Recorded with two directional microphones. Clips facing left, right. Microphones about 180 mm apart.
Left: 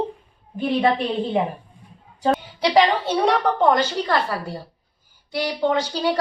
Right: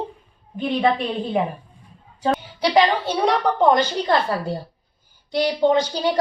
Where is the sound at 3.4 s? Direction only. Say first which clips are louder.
Right 1 dB; 15° right (ahead or behind).